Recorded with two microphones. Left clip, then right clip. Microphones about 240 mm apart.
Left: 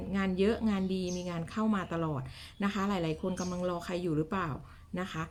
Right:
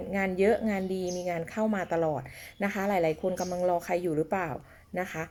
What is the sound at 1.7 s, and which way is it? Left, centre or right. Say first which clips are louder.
A woman's voice: right 6 dB; centre.